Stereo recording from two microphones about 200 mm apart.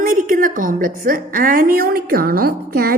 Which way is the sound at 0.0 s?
45° right (ahead or behind).